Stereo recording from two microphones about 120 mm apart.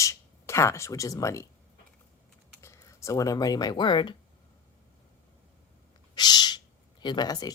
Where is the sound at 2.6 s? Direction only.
25° left (ahead or behind); by 4.1 s 40° left (ahead or behind).